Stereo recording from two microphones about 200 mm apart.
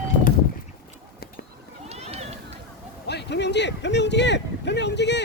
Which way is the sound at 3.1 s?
55° left (ahead or behind).